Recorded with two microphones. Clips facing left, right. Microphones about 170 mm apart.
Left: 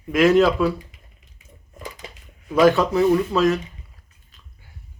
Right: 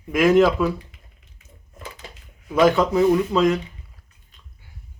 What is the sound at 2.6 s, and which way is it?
Speech, 15° right (ahead or behind).